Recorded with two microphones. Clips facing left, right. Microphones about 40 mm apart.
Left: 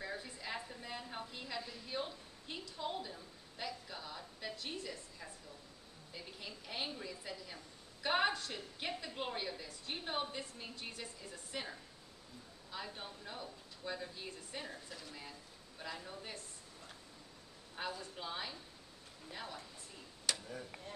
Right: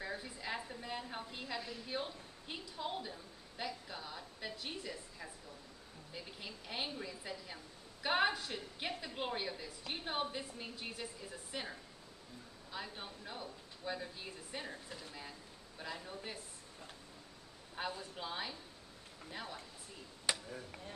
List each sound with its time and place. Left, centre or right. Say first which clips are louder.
0.0 s a sound: right 1 dB; centre
1.9 s a woman's voice: even; centre
15.8 s a woman's voice: right 1 dB; centre
17.7 s a woman's voice: right 1 dB; centre
20.3 s speech: right 2 dB; right